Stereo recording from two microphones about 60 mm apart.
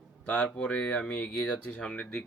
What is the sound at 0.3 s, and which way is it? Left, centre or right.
Speech, left.